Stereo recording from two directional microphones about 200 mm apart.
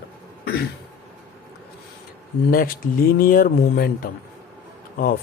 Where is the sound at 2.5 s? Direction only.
45° left (ahead or behind).